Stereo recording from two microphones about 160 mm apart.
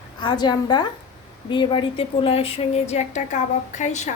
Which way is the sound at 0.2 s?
25° left (ahead or behind).